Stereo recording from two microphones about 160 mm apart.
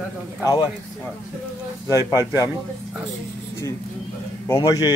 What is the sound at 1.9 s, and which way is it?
Speech, 20° left (ahead or behind).